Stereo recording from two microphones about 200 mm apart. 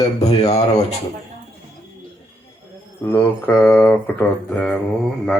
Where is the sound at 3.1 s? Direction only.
10° left (ahead or behind).